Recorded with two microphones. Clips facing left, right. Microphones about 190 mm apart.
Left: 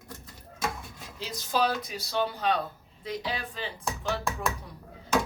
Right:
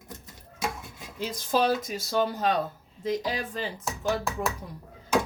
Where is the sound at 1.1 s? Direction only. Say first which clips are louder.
Right 3 dB; 50° right (ahead or behind).